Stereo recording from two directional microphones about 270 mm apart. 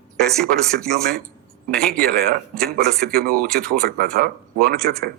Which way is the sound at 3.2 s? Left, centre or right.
Right.